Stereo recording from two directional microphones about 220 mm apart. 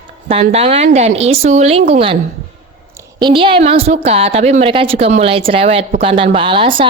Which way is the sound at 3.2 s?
25° right (ahead or behind).